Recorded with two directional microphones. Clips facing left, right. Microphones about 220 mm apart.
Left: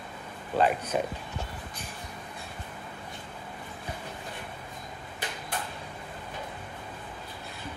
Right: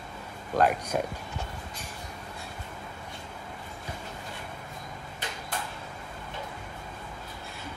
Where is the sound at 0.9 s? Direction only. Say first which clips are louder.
Even; 5° left (ahead or behind).